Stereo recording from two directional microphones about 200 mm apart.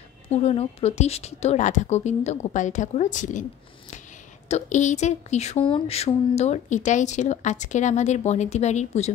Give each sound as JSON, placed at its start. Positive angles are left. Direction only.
{"t": 0.5, "sound": "speech", "side_deg": 30}
{"t": 4.5, "sound": "speech", "side_deg": 35}